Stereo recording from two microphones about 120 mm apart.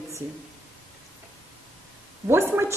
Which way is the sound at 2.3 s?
20° right (ahead or behind).